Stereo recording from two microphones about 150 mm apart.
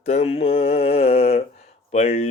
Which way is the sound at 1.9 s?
45° left (ahead or behind).